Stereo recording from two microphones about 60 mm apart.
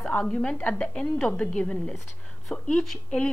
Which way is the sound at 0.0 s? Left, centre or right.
Centre.